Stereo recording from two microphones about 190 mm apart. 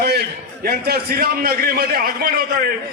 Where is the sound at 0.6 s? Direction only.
55° right (ahead or behind).